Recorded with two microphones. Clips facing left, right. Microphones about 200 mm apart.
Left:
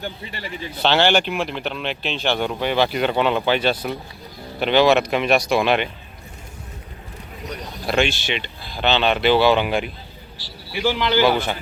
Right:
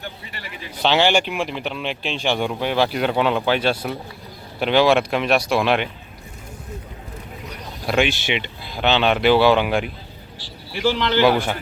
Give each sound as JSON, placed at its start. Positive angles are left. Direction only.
{"t": 0.3, "sound": "a man's voice", "side_deg": 30}
{"t": 0.8, "sound": "speech", "side_deg": -10}
{"t": 7.9, "sound": "speech", "side_deg": -5}
{"t": 8.3, "sound": "speech", "side_deg": -15}
{"t": 10.7, "sound": "speech", "side_deg": 5}
{"t": 11.3, "sound": "speech", "side_deg": -5}